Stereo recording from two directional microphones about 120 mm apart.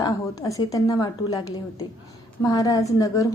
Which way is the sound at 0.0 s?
30° left (ahead or behind).